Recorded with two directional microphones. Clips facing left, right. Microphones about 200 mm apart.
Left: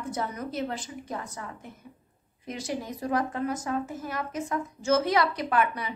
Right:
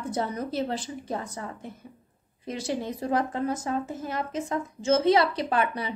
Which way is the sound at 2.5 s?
30° right (ahead or behind).